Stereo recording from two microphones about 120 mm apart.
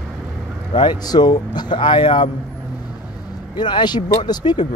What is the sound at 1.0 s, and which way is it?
Speech, 35° left (ahead or behind).